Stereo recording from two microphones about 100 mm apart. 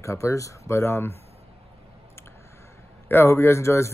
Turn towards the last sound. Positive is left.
turn(degrees=25)  # may be behind; listen again after turning